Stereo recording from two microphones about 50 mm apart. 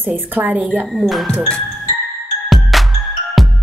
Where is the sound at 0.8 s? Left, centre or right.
Centre.